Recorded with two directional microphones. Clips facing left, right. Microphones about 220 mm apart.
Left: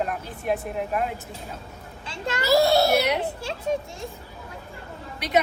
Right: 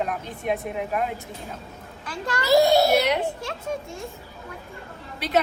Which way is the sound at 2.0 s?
25° left (ahead or behind).